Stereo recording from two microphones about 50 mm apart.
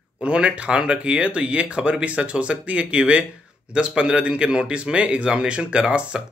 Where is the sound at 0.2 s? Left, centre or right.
Right.